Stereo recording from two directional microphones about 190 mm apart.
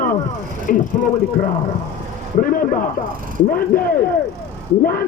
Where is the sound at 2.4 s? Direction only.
45° left (ahead or behind).